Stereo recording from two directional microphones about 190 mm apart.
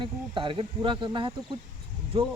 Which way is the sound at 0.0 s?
25° right (ahead or behind).